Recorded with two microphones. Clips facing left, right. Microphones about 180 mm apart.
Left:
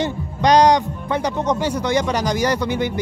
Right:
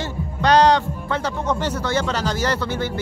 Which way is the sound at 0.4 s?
15° left (ahead or behind).